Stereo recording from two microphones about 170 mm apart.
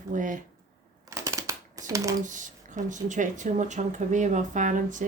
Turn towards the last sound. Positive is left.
turn(degrees=-45)  # may be behind; listen again after turning